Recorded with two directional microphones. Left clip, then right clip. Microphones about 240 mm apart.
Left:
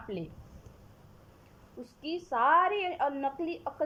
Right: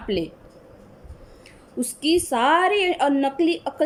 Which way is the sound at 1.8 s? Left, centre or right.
Centre.